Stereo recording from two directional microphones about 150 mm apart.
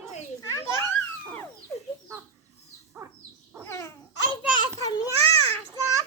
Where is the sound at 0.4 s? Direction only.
20° left (ahead or behind).